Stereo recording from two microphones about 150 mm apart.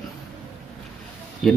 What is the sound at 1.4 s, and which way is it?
Speech, centre (ahead or behind).